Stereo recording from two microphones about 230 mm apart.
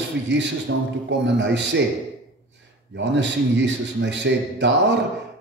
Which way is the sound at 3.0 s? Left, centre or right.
Right.